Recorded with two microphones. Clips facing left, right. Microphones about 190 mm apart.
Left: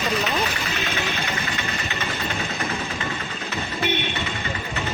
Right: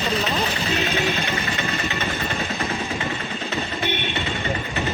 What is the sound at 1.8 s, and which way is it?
Vehicle, 15° right (ahead or behind).